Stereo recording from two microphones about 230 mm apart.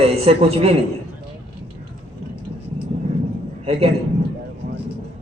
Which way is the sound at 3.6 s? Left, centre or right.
Right.